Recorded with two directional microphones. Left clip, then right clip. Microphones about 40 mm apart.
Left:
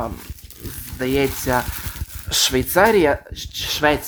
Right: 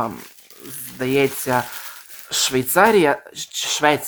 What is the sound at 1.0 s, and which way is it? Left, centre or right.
Speech, right.